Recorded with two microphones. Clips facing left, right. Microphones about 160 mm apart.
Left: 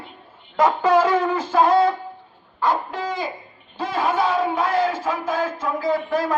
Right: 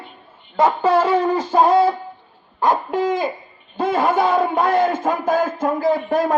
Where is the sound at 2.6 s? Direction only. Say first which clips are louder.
Right 4 dB; 45° right (ahead or behind).